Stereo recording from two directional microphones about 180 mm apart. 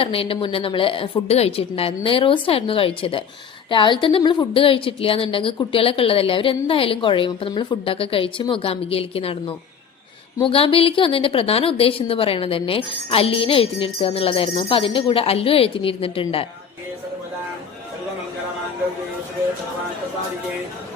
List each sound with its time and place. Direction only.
0.0 s a woman's voice: 30° left (ahead or behind)